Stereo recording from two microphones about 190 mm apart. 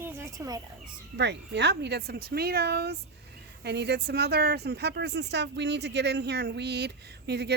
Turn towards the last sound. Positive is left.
turn(degrees=-60)  # may be behind; listen again after turning